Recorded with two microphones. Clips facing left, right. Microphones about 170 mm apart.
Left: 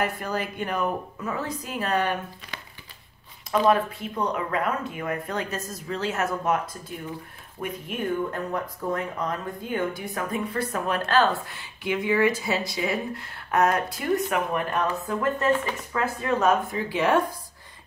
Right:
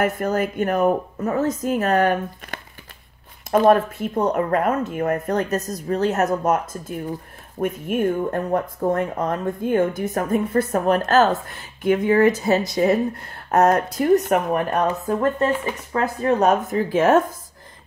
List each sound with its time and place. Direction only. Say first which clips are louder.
0.0 s speech: right 7 dB; 45° right (ahead or behind)